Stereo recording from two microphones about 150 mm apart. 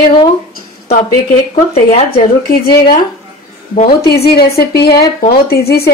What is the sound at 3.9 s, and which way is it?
A woman's voice, 90° left.